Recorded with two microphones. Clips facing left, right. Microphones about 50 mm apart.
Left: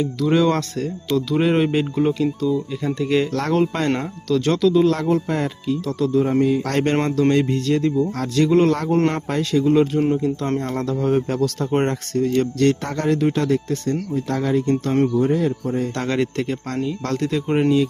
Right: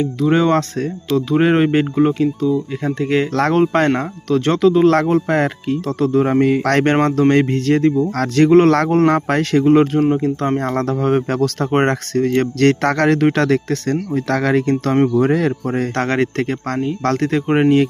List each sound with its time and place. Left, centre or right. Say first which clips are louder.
0.0 s speech: right 2 dB; right
8.1 s speech: right 5 dB; right
8.4 s speech: right 6 dB; right
9.1 s speech: right 5 dB; right
16.0 s speech: right 3 dB; right